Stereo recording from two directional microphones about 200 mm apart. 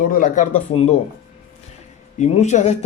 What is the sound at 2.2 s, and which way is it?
Speech, 35° left (ahead or behind).